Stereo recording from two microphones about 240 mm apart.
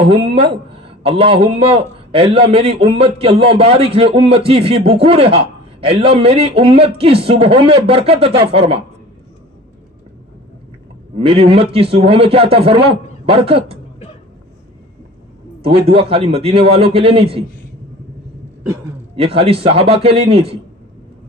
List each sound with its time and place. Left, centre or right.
0.1 s a man's voice: right
11.2 s a man's voice: right
15.6 s a man's voice: right
19.1 s a man's voice: right